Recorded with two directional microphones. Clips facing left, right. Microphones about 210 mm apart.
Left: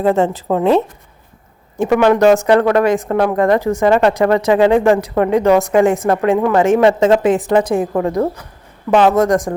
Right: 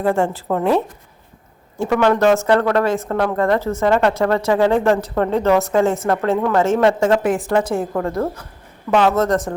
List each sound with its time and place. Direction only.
0.0 s a woman's voice: 20° left (ahead or behind)
1.8 s speech: 15° left (ahead or behind)